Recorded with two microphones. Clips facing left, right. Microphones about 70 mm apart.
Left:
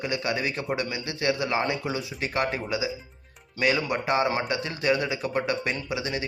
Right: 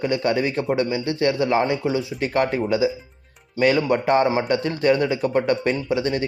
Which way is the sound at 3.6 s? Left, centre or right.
Right.